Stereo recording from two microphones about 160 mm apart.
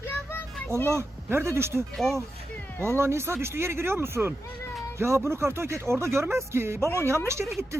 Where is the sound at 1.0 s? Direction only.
15° right (ahead or behind).